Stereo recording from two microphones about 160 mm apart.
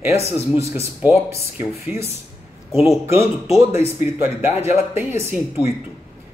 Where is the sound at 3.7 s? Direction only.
15° right (ahead or behind).